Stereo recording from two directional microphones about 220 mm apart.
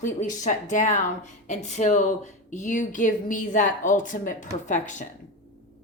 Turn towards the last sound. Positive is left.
turn(degrees=35)  # may be behind; listen again after turning